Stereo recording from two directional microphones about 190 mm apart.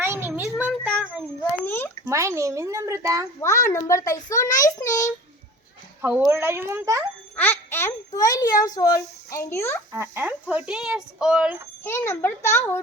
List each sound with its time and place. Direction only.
0.0 s a sound: 10° right (ahead or behind)
1.6 s a sound: 10° left (ahead or behind)
2.0 s speech: 15° right (ahead or behind)
3.4 s a child's voice: 15° left (ahead or behind)
6.0 s speech: 10° right (ahead or behind)
7.3 s a child's voice: 10° left (ahead or behind)
9.9 s speech: 10° right (ahead or behind)
11.8 s a child's voice: 15° left (ahead or behind)